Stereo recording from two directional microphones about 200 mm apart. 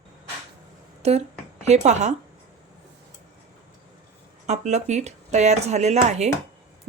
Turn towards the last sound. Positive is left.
turn(degrees=-35)  # may be behind; listen again after turning